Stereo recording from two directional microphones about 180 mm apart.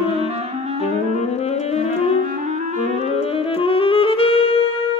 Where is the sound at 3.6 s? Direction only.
30° left (ahead or behind).